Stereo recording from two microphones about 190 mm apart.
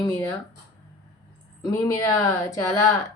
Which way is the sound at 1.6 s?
15° left (ahead or behind).